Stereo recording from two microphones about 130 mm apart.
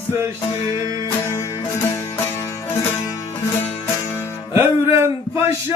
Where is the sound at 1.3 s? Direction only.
25° left (ahead or behind).